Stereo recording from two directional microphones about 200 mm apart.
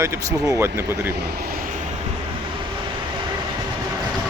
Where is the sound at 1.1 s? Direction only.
50° right (ahead or behind).